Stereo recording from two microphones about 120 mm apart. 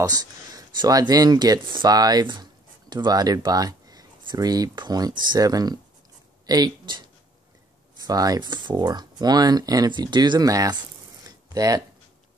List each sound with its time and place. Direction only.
0.0 s speech: 30° right (ahead or behind)
8.1 s speech: 30° right (ahead or behind)